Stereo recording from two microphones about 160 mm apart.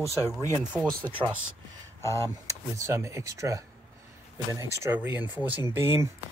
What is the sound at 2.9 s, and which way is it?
Speech, 15° right (ahead or behind).